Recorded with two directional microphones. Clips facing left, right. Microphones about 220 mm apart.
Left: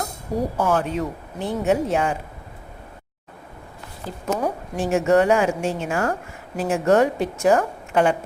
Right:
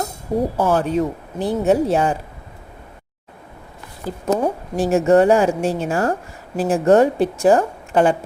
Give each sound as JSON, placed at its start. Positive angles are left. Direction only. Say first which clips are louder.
{"t": 0.5, "sound": "a woman's voice", "louder": "right 3 dB", "side_deg": -35}
{"t": 4.3, "sound": "a woman's voice", "louder": "right 5 dB", "side_deg": -30}